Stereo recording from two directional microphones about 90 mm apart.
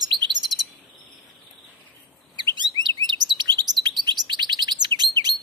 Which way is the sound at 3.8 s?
55° right (ahead or behind).